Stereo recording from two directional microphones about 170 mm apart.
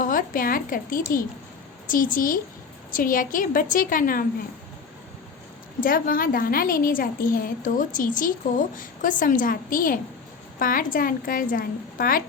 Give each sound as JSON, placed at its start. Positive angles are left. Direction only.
{"t": 0.0, "sound": "a woman's voice", "side_deg": 55}
{"t": 5.8, "sound": "a woman's voice", "side_deg": 55}